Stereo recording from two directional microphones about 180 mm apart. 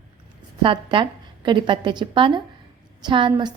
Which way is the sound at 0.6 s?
30° right (ahead or behind).